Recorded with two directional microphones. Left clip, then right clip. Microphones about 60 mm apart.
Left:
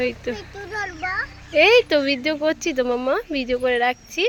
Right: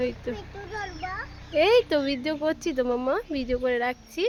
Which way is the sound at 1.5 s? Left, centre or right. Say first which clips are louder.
Left 6 dB; left.